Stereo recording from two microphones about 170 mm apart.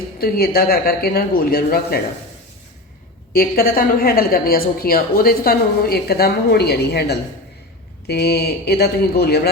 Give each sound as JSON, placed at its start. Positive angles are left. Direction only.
{"t": 0.2, "sound": "a woman's voice", "side_deg": 60}
{"t": 3.3, "sound": "a woman's voice", "side_deg": 55}